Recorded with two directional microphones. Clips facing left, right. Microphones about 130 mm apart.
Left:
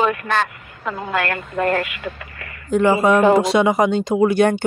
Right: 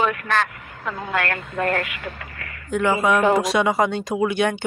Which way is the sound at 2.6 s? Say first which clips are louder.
Left 5 dB; 35° left (ahead or behind).